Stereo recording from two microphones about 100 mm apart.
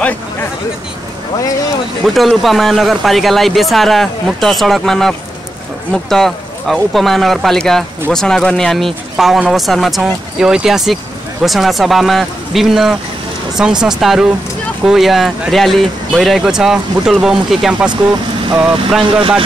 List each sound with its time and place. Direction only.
2.0 s speech: centre (ahead or behind)